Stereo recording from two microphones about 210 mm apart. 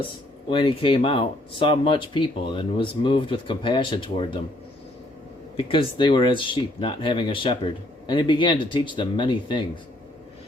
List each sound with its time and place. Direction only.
0.4 s speech: 25° left (ahead or behind)
5.5 s speech: 25° left (ahead or behind)